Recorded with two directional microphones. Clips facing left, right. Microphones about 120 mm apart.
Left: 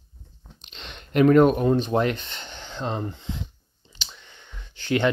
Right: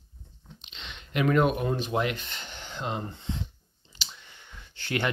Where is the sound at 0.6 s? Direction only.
40° left (ahead or behind).